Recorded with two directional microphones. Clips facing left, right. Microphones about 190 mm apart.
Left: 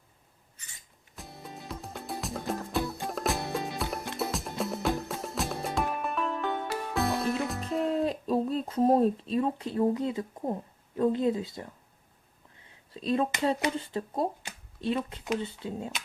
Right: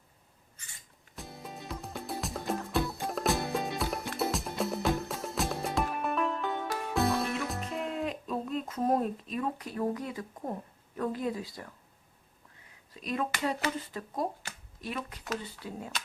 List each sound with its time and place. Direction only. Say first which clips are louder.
1.1 s music: right 1 dB; centre (ahead or behind)
7.7 s a sound: left 10 dB; 35° left (ahead or behind)
13.7 s speech: left 4 dB; 30° left (ahead or behind)